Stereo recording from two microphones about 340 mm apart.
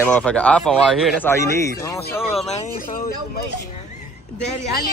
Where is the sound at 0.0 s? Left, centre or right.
Centre.